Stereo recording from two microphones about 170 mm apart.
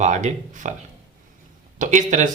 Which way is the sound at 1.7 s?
45° right (ahead or behind).